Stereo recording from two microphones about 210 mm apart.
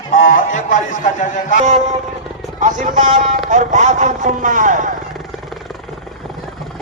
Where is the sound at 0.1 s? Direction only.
40° left (ahead or behind).